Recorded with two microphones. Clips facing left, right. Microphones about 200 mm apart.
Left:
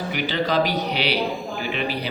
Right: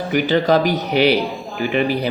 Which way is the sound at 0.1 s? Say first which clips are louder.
Right 9 dB; 45° right (ahead or behind).